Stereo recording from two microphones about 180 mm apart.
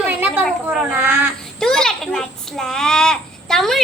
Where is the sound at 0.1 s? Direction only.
10° right (ahead or behind).